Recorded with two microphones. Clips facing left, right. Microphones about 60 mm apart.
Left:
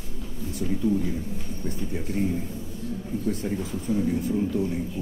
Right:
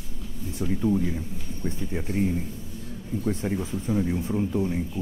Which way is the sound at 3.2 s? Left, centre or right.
Right.